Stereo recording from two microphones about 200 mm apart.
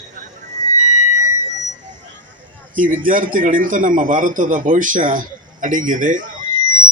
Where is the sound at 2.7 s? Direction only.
45° right (ahead or behind).